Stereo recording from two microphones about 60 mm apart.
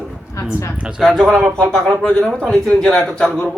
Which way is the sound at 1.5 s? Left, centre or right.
Centre.